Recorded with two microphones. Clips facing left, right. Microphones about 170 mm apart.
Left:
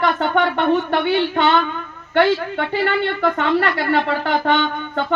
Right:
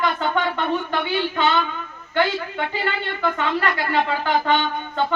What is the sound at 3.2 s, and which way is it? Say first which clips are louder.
Speech: left 2 dB; 60° left (ahead or behind).